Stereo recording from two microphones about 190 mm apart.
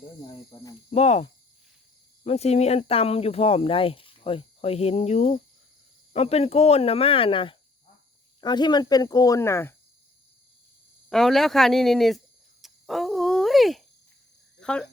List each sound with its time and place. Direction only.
0.3 s speech: 20° left (ahead or behind)
0.9 s speech: 35° left (ahead or behind); by 9.7 s 15° left (ahead or behind)
11.1 s speech: centre (ahead or behind)
12.6 s a sound: centre (ahead or behind)